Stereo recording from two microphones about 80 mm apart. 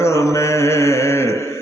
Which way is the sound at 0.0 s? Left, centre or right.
Left.